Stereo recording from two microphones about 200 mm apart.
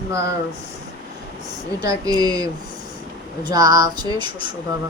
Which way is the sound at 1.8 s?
20° right (ahead or behind).